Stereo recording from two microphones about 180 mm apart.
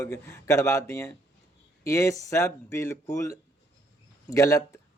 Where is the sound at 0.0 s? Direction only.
15° left (ahead or behind).